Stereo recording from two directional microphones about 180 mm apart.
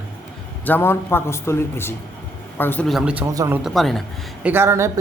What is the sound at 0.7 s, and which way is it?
Speech, 10° left (ahead or behind).